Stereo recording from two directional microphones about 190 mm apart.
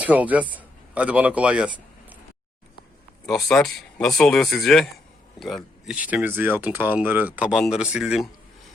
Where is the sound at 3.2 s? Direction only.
5° left (ahead or behind).